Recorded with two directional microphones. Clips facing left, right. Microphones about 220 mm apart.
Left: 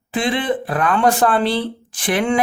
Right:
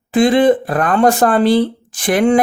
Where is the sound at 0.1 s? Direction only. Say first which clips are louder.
Right 9 dB; 45° right (ahead or behind).